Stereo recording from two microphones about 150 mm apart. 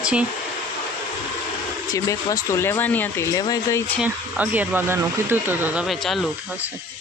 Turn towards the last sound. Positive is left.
turn(degrees=0)  # may be behind; listen again after turning